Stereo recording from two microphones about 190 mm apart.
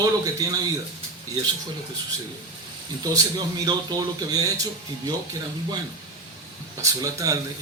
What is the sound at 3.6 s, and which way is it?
Speech, 20° right (ahead or behind).